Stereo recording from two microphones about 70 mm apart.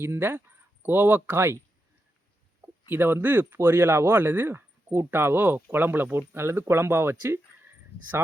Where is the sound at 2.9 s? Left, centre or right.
Right.